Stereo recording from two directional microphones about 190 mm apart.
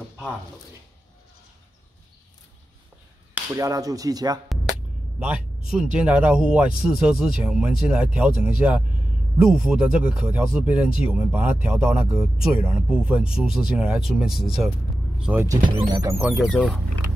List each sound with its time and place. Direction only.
3.3 s a sound: 15° right (ahead or behind)
5.2 s a man's voice: 5° right (ahead or behind)
15.7 s speech: 20° right (ahead or behind)
16.3 s speech: 5° left (ahead or behind)